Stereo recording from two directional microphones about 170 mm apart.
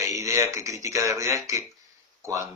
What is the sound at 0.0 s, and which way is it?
A man's voice, 20° right (ahead or behind).